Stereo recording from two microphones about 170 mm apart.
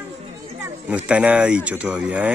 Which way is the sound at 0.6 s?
10° right (ahead or behind).